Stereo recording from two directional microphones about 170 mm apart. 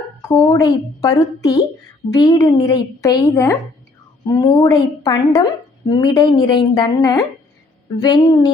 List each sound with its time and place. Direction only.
0.2 s speech: 20° left (ahead or behind)